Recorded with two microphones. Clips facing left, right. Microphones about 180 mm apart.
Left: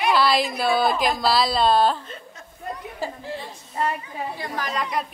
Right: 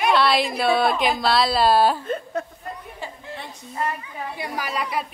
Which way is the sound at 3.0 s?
40° left (ahead or behind).